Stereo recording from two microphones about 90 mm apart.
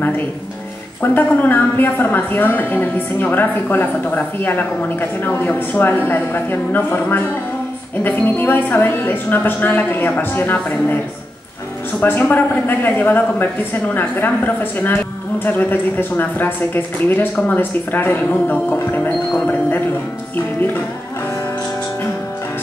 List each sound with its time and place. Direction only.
1.0 s speech: 20° left (ahead or behind)
12.0 s speech: 20° left (ahead or behind)